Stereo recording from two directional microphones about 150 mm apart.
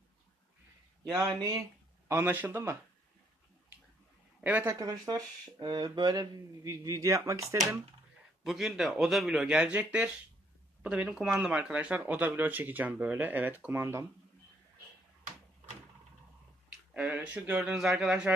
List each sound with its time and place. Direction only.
1.0 s speech: 25° right (ahead or behind)
4.4 s speech: 10° right (ahead or behind)
4.7 s speech: 25° right (ahead or behind)
8.5 s speech: centre (ahead or behind)
16.9 s speech: 10° right (ahead or behind)